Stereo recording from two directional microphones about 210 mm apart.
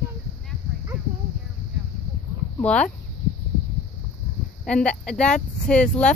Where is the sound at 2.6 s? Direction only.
5° left (ahead or behind).